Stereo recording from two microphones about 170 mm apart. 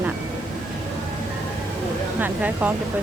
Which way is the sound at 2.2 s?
10° right (ahead or behind).